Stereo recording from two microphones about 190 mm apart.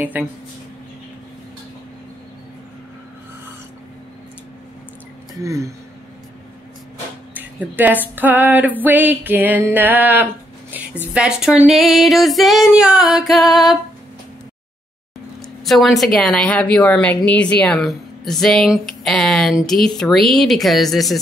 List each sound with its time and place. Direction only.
5.3 s speech: 15° right (ahead or behind)
7.3 s female singing: 10° right (ahead or behind)
11.1 s a woman's voice: 5° right (ahead or behind)
15.6 s a woman's voice: centre (ahead or behind)